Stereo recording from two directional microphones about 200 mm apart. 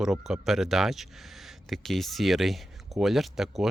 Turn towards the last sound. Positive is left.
turn(degrees=0)  # may be behind; listen again after turning